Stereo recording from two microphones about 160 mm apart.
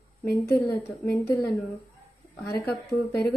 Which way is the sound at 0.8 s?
10° left (ahead or behind).